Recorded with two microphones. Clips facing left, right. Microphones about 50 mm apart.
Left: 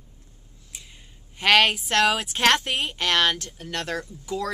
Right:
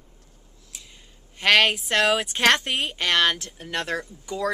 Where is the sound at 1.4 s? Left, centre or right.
Centre.